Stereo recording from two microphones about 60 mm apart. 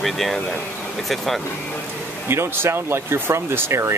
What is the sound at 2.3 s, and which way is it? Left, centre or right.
Speech, right.